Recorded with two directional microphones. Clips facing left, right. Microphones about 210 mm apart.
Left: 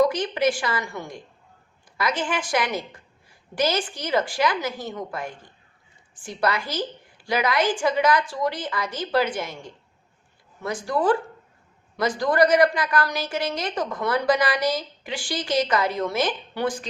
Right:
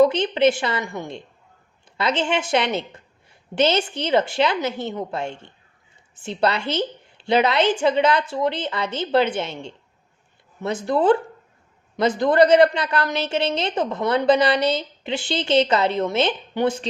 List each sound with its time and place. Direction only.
0.0 s a woman's voice: 25° right (ahead or behind)